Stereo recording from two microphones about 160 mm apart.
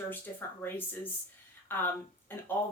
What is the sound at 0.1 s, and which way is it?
Speech, 15° left (ahead or behind).